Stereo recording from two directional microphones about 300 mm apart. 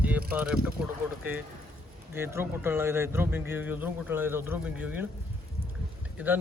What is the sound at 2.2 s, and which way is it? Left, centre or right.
Speech, centre.